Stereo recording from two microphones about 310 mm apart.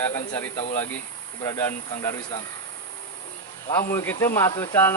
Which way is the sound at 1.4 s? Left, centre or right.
Centre.